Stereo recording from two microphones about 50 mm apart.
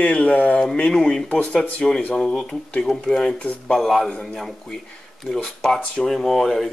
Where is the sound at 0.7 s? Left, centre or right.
Centre.